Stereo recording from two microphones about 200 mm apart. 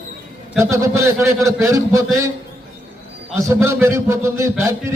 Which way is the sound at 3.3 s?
15° right (ahead or behind).